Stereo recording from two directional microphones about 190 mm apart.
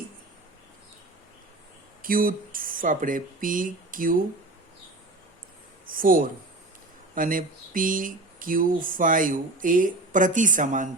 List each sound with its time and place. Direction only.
2.0 s speech: 50° right (ahead or behind)
5.9 s speech: 50° right (ahead or behind)